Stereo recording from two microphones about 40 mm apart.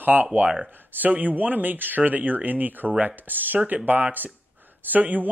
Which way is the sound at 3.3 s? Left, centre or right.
Right.